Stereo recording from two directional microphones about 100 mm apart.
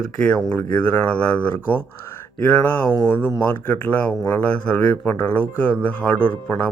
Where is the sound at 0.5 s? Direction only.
20° left (ahead or behind).